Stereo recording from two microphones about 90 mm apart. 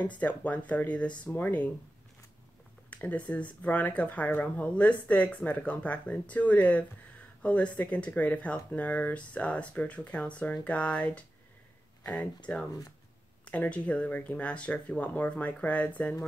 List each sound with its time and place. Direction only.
0.0 s speech: 15° left (ahead or behind)
2.9 s speech: 15° left (ahead or behind)
13.5 s speech: 15° left (ahead or behind)